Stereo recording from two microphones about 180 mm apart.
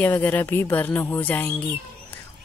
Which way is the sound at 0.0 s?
10° left (ahead or behind).